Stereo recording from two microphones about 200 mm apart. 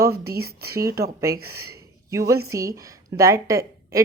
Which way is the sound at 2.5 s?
15° right (ahead or behind).